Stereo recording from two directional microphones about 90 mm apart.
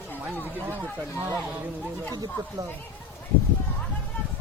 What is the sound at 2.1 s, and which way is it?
Speech, 45° right (ahead or behind).